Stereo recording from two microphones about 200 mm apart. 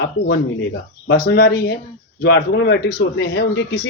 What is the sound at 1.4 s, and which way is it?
A man's voice, 50° left (ahead or behind).